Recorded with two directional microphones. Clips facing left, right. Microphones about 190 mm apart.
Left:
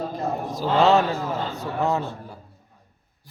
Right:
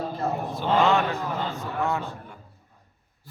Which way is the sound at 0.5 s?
35° left (ahead or behind).